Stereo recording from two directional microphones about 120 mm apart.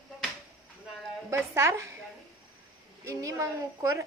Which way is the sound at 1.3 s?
25° right (ahead or behind).